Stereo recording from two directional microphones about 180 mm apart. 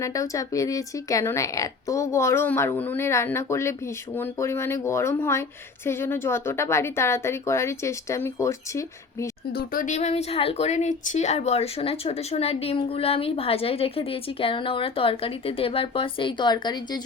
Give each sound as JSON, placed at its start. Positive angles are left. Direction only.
{"t": 0.0, "sound": "a woman's voice", "side_deg": 20}
{"t": 9.6, "sound": "speech", "side_deg": 50}